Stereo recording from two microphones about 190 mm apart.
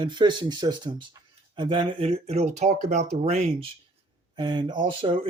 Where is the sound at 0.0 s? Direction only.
25° right (ahead or behind).